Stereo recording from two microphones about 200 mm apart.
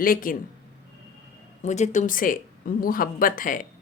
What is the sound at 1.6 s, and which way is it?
A woman's voice, 35° left (ahead or behind).